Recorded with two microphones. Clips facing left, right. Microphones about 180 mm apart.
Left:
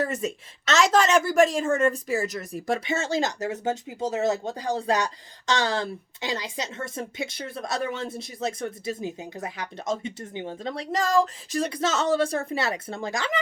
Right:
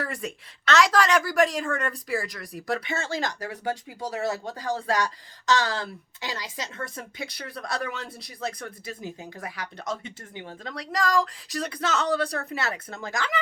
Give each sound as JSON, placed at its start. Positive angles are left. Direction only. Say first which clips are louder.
{"t": 0.0, "sound": "speech", "louder": "left 5 dB", "side_deg": 20}